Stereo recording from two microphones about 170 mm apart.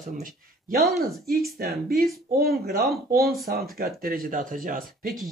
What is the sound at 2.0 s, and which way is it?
Speech, 65° right (ahead or behind).